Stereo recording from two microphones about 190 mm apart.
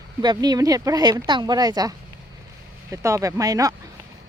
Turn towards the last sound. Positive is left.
turn(degrees=-20)  # may be behind; listen again after turning